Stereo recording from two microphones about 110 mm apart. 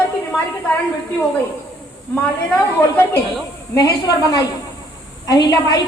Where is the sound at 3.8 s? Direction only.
35° left (ahead or behind).